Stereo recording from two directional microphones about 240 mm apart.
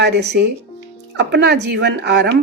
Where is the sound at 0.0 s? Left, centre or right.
Right.